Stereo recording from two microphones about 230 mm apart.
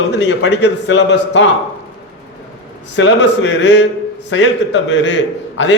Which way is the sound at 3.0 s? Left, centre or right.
Left.